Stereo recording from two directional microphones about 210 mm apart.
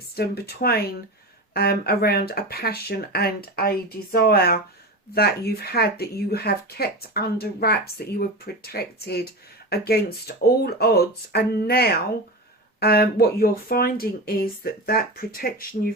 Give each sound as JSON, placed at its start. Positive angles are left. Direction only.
{"t": 0.2, "sound": "speech", "side_deg": 50}